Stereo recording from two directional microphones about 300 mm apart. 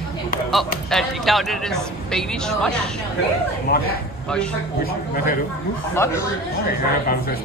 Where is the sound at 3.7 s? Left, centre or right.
Left.